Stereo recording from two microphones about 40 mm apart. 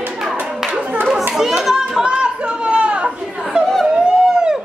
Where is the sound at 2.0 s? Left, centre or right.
Right.